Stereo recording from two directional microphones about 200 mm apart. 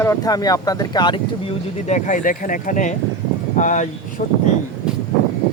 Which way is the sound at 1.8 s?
35° left (ahead or behind).